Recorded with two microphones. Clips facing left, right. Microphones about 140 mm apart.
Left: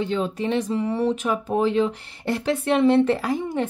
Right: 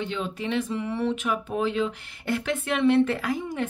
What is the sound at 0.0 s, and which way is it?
Speech, 40° left (ahead or behind).